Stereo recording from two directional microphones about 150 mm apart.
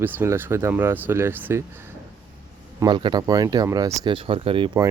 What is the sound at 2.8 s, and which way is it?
Speech, 30° right (ahead or behind).